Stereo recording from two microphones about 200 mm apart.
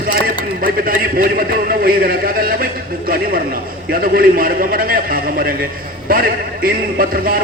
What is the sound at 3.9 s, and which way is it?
A man's voice, 45° right (ahead or behind).